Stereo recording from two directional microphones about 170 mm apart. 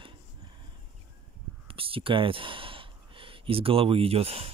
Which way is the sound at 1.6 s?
35° right (ahead or behind).